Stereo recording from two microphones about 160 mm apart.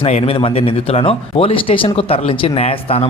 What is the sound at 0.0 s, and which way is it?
A man's voice, 40° left (ahead or behind).